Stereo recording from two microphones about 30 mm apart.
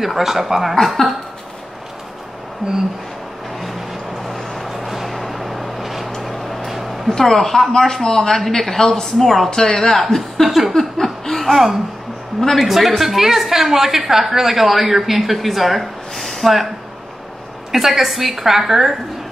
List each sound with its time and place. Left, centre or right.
0.0 s a woman's voice: centre
1.0 s speech: left
4.6 s vehicle: centre
7.1 s a woman's voice: centre
9.5 s speech: left
10.1 s a woman's voice: centre
10.8 s a sound: centre
11.5 s a woman's voice: centre
17.6 s a woman's voice: centre